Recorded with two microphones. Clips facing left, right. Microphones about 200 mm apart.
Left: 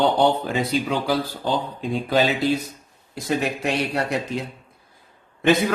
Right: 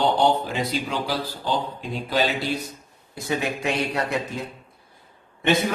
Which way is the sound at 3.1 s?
65° left (ahead or behind).